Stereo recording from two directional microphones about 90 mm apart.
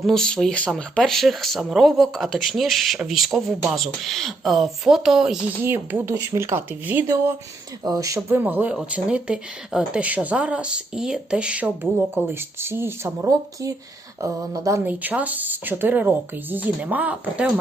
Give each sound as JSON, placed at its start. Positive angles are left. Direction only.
{"t": 0.0, "sound": "speech", "side_deg": 5}
{"t": 5.6, "sound": "speech", "side_deg": -25}
{"t": 7.9, "sound": "speech", "side_deg": -40}
{"t": 8.4, "sound": "speech", "side_deg": -20}
{"t": 11.8, "sound": "speech", "side_deg": -25}
{"t": 14.8, "sound": "speech", "side_deg": -20}